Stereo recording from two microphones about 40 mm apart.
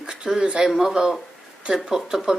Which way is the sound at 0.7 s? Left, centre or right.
Centre.